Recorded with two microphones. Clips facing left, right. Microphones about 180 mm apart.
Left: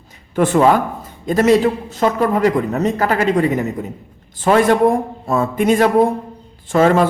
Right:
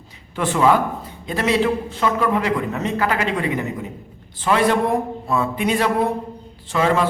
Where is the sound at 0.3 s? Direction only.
45° left (ahead or behind).